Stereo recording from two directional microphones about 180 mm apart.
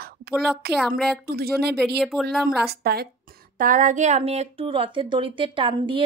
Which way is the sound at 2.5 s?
60° right (ahead or behind).